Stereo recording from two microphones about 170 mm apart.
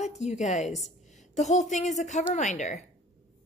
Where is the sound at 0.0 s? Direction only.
40° left (ahead or behind).